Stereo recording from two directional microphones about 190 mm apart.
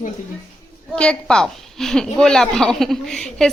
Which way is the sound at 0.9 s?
5° left (ahead or behind).